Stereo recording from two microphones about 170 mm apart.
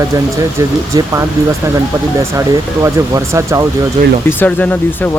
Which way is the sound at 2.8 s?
20° right (ahead or behind).